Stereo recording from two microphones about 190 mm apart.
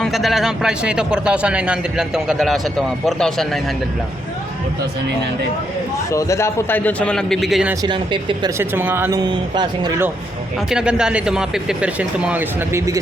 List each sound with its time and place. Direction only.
0.0 s a man's voice: centre (ahead or behind)
6.1 s a man's voice: 15° left (ahead or behind); by 7.8 s 5° right (ahead or behind)
7.8 s speech: 25° right (ahead or behind)
10.7 s a man's voice: 5° right (ahead or behind)